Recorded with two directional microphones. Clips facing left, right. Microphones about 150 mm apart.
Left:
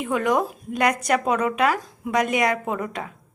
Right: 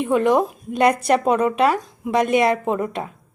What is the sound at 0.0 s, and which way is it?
A woman's voice, 25° right (ahead or behind).